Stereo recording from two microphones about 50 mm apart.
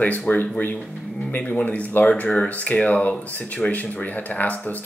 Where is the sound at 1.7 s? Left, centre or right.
Left.